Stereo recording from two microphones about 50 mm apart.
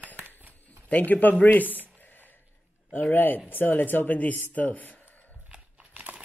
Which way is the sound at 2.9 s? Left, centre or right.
Left.